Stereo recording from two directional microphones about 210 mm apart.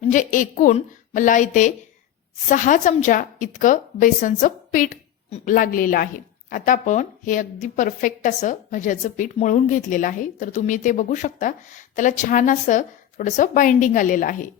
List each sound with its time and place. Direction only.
0.0 s a woman's voice: 35° left (ahead or behind)